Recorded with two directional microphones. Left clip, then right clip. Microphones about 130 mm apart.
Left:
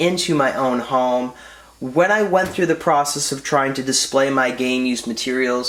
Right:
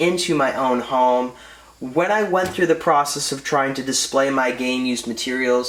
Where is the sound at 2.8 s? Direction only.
15° left (ahead or behind); by 5.6 s 35° left (ahead or behind).